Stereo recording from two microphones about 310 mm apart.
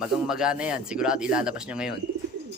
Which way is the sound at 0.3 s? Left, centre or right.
Centre.